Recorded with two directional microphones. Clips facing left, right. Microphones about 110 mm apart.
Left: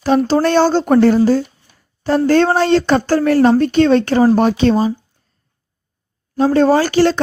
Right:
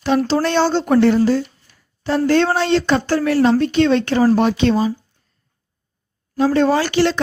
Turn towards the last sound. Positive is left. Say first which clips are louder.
# left 4 dB
turn(degrees=40)  # may be behind; listen again after turning